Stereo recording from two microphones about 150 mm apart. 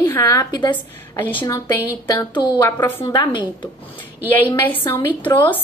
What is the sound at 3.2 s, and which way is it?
Speech, 30° left (ahead or behind).